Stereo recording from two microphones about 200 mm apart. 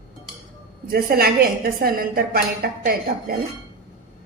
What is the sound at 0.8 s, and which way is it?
A woman's voice, 50° right (ahead or behind).